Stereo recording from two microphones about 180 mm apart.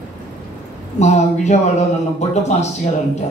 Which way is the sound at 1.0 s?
40° left (ahead or behind).